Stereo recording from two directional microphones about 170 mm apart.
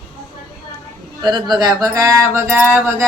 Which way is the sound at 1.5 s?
20° right (ahead or behind).